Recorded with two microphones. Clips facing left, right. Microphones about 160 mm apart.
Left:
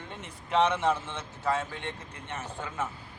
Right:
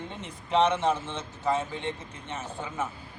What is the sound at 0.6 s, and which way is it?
Speech, 10° left (ahead or behind).